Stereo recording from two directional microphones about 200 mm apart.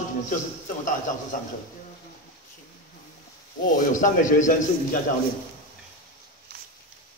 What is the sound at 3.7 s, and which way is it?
Speech, 40° left (ahead or behind).